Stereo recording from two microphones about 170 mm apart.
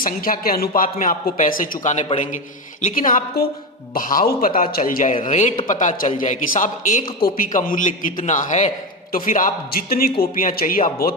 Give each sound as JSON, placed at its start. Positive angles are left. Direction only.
{"t": 0.0, "sound": "a man's voice", "side_deg": 55}